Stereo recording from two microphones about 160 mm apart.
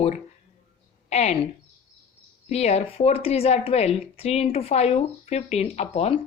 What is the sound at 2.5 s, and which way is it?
A woman's voice, 40° left (ahead or behind).